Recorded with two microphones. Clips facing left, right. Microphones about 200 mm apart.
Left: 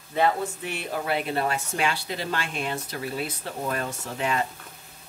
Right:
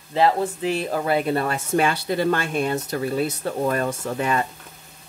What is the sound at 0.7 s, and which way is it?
Speech, 45° right (ahead or behind).